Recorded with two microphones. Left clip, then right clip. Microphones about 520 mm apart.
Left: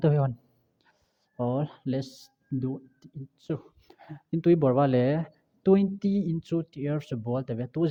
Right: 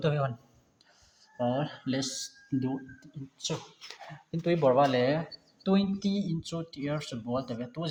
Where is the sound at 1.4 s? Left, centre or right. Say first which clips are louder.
Even; left.